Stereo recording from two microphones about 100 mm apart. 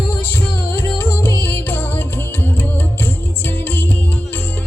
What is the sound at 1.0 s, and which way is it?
Music, 20° left (ahead or behind).